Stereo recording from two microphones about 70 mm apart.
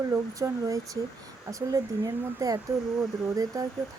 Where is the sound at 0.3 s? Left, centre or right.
Right.